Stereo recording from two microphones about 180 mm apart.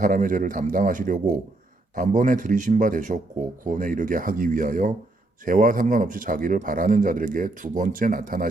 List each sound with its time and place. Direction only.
0.0 s speech: 50° right (ahead or behind)